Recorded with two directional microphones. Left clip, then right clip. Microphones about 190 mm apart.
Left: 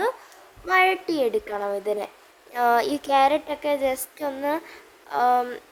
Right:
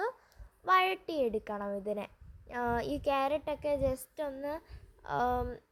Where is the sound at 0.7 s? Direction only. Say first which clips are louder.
Left 8 dB; 25° right (ahead or behind).